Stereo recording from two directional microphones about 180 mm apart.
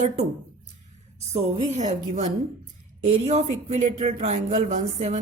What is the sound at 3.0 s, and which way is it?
Speech, 35° right (ahead or behind).